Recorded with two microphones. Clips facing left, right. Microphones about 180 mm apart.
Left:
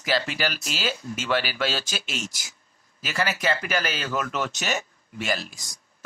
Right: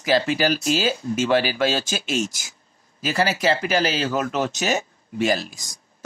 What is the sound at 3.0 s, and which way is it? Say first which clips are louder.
Speech: right 5 dB; 35° right (ahead or behind).